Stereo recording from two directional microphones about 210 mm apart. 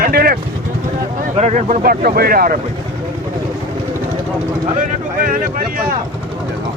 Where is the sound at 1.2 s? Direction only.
35° right (ahead or behind).